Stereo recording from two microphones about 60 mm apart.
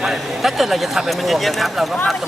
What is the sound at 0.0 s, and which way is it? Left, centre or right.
Speech, centre.